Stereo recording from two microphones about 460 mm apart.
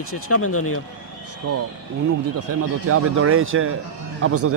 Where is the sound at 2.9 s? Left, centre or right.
Right.